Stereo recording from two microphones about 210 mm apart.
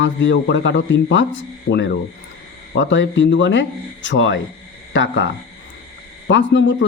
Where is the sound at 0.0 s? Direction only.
60° left (ahead or behind).